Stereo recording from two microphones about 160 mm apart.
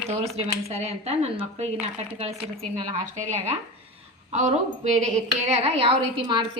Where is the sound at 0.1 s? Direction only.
40° right (ahead or behind).